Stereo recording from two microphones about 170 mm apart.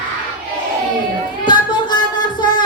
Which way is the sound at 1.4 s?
25° left (ahead or behind).